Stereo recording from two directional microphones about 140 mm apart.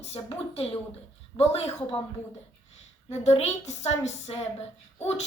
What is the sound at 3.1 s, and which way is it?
A woman's voice, 50° left (ahead or behind).